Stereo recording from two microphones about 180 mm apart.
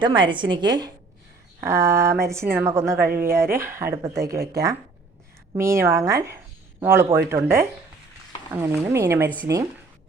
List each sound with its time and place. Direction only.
0.0 s a woman's voice: 25° right (ahead or behind)
5.5 s speech: 15° right (ahead or behind)